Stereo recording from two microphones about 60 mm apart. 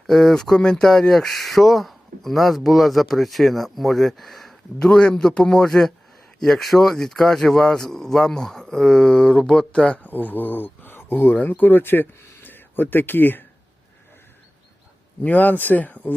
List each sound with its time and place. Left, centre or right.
0.1 s speech: centre; by 13.4 s left
15.2 s speech: left